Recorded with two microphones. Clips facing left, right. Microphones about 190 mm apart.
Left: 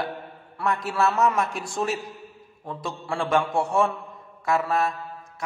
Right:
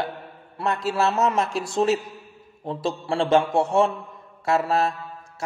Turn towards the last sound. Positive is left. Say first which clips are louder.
# right 2 dB
turn(degrees=-30)  # may be behind; listen again after turning